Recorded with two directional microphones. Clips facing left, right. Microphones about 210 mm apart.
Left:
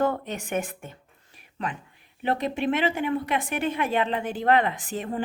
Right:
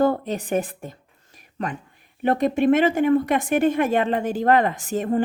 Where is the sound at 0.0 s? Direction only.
35° right (ahead or behind).